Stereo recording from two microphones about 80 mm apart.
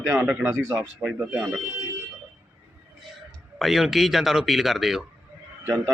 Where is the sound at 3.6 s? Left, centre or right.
Centre.